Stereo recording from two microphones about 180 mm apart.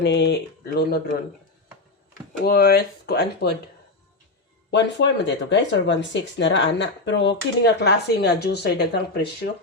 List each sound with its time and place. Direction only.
0.0 s speech: 70° left (ahead or behind)
2.4 s speech: 60° left (ahead or behind)
4.7 s speech: 75° left (ahead or behind)